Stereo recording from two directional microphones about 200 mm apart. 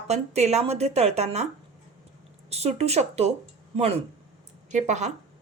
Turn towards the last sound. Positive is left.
turn(degrees=-35)  # may be behind; listen again after turning